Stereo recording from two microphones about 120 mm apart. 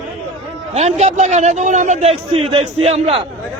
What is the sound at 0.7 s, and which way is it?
A man's voice, 65° right (ahead or behind).